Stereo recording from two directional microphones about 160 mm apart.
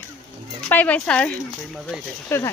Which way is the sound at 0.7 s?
10° left (ahead or behind).